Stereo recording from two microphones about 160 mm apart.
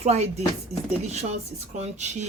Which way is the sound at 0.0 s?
45° right (ahead or behind).